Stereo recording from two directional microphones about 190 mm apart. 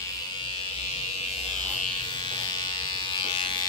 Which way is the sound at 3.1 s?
25° left (ahead or behind).